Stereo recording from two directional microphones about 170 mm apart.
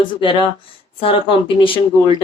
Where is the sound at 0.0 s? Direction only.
30° left (ahead or behind).